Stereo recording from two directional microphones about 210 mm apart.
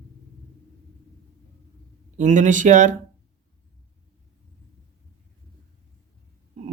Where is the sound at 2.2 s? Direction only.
35° right (ahead or behind).